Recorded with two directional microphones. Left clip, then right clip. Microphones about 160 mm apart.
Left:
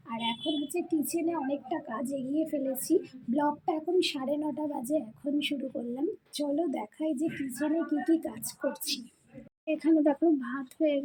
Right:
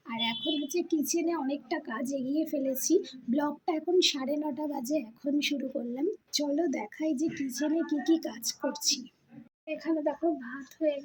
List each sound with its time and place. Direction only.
0.1 s a woman's voice: 5° right (ahead or behind)
9.6 s a child's voice: 25° left (ahead or behind)